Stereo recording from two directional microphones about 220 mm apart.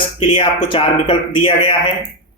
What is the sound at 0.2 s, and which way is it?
Speech, 25° left (ahead or behind).